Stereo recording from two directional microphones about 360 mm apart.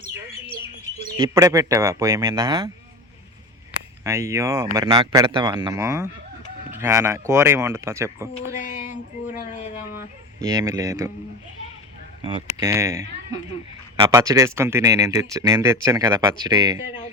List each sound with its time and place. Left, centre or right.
1.1 s speech: centre
3.7 s speech: centre
8.6 s a sound: left
9.8 s speech: centre
12.2 s speech: centre